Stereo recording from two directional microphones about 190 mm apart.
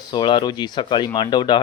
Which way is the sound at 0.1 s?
25° left (ahead or behind).